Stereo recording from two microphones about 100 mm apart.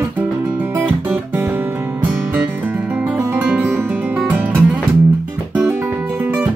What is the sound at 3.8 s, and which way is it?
Music, 15° right (ahead or behind).